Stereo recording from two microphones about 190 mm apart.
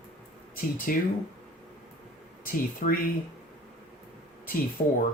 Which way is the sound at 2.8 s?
40° left (ahead or behind).